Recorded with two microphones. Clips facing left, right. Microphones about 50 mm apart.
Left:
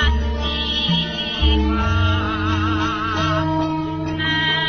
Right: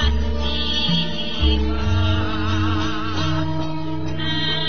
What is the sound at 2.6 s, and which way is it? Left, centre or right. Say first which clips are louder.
Music: left 3 dB; left.